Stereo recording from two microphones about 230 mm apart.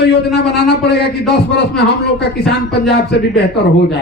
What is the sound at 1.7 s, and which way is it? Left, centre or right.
Speech, centre.